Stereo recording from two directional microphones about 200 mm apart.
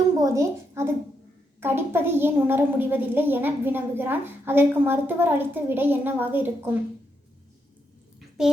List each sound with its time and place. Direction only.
0.2 s a woman's voice: 15° right (ahead or behind)
8.4 s a child's voice: centre (ahead or behind)